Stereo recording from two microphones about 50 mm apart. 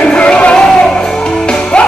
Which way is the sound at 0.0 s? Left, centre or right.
Centre.